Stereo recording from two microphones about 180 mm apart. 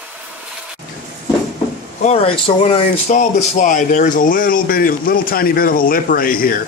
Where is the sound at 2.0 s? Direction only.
35° left (ahead or behind); by 6.5 s 50° left (ahead or behind).